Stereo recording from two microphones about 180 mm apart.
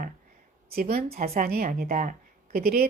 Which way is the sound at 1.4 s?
55° right (ahead or behind).